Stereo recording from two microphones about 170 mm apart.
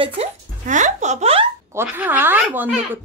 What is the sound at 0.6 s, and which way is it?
Speech, 50° right (ahead or behind).